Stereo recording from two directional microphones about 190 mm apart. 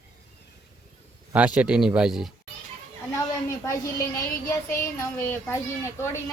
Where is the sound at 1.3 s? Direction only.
5° right (ahead or behind).